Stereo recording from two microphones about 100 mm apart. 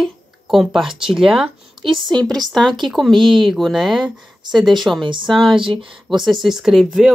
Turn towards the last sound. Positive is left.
turn(degrees=0)  # may be behind; listen again after turning